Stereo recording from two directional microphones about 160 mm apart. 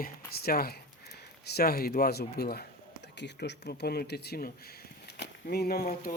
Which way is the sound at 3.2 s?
90° left.